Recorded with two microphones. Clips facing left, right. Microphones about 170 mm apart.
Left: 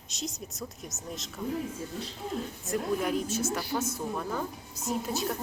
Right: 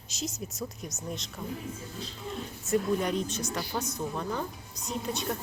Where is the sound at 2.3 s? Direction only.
Centre (ahead or behind).